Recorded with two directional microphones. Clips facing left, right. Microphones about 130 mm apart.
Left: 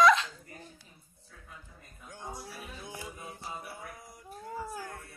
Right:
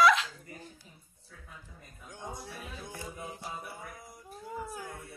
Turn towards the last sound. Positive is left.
turn(degrees=0)  # may be behind; listen again after turning